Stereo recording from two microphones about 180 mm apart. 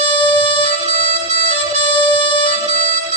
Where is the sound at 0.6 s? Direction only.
40° right (ahead or behind).